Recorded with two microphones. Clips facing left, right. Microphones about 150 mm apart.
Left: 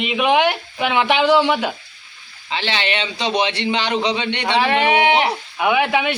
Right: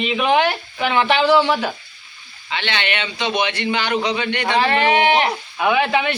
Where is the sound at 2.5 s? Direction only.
30° left (ahead or behind).